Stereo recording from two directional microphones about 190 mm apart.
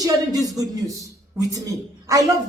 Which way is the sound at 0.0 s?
20° right (ahead or behind).